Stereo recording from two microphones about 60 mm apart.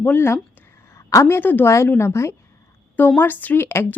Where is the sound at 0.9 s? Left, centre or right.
Left.